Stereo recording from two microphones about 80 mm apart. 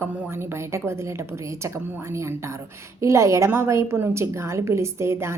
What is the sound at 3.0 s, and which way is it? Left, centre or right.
A woman's voice, right.